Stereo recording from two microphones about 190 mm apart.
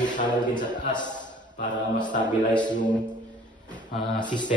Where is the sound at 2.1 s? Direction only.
40° left (ahead or behind).